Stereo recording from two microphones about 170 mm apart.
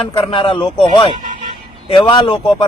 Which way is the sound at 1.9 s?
30° left (ahead or behind).